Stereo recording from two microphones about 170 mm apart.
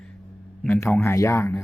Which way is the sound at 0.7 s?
15° left (ahead or behind).